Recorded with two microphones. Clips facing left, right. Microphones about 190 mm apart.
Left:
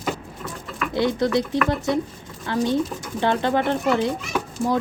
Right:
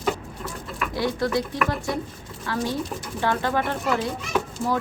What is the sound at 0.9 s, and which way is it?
Speech, 25° left (ahead or behind).